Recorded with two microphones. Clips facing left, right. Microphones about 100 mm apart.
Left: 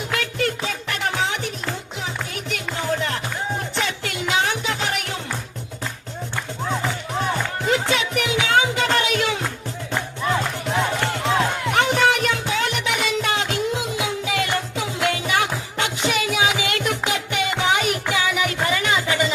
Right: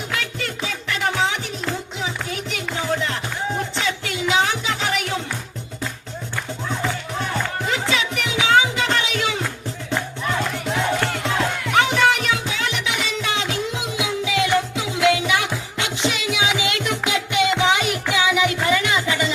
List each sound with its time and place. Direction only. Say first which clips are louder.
0.1 s music: left 6 dB; 45° left (ahead or behind)
2.0 s music: left 1 dB; 50° left (ahead or behind)
7.7 s music: left 4 dB; 45° left (ahead or behind)
11.0 s music: left 1 dB; 25° left (ahead or behind)
11.8 s music: right 1 dB; 45° left (ahead or behind)